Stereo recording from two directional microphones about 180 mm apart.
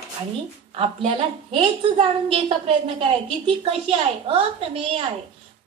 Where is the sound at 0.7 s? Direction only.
30° right (ahead or behind).